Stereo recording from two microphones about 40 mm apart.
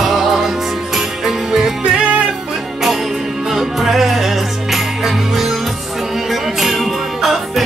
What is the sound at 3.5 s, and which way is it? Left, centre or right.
Music, centre.